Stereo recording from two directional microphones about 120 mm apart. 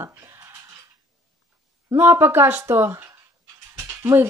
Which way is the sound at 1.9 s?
20° right (ahead or behind).